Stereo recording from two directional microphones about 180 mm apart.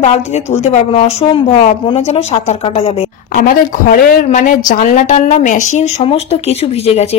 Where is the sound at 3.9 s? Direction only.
50° left (ahead or behind).